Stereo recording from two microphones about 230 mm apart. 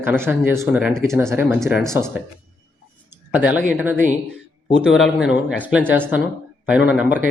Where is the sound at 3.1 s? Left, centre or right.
Centre.